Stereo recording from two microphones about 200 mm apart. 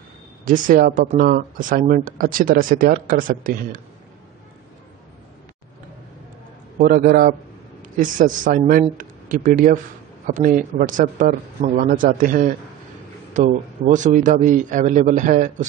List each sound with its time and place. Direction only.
0.5 s speech: 45° right (ahead or behind)
6.8 s a man's voice: 45° right (ahead or behind)